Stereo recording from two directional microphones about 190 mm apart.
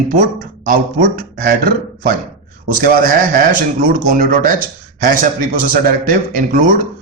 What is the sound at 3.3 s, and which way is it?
A man's voice, 50° right (ahead or behind).